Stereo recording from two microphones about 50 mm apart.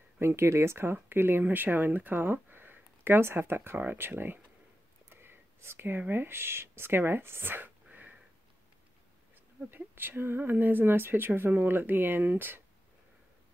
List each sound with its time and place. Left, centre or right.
0.4 s speech: right
0.9 s speech: right
9.7 s speech: right